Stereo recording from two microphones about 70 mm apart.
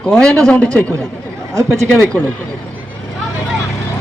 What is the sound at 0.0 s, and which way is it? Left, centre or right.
Speech, centre.